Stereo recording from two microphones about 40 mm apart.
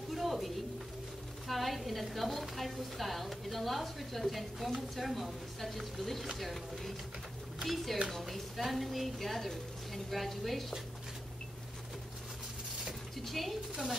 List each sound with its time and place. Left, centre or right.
0.1 s a sound: centre
1.5 s a woman's voice: centre
7.6 s a woman's voice: centre
13.2 s a woman's voice: centre